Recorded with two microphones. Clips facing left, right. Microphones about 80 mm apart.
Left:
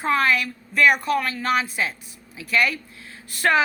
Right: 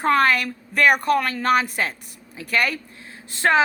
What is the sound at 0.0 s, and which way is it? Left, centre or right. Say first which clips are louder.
A woman's voice: right 3 dB; right.